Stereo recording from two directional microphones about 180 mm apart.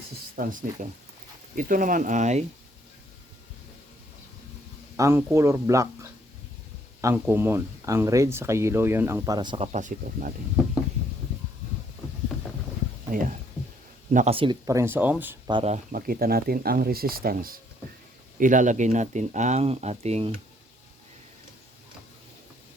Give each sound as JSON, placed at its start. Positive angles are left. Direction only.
{"t": 0.3, "sound": "speech", "side_deg": -50}
{"t": 4.9, "sound": "speech", "side_deg": -15}
{"t": 9.7, "sound": "speech", "side_deg": -45}
{"t": 13.1, "sound": "speech", "side_deg": -50}
{"t": 14.3, "sound": "speech", "side_deg": -25}
{"t": 15.4, "sound": "speech", "side_deg": -25}
{"t": 15.7, "sound": "speech", "side_deg": -50}